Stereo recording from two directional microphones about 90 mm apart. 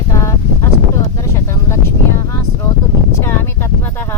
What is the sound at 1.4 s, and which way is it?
Speech, 30° left (ahead or behind).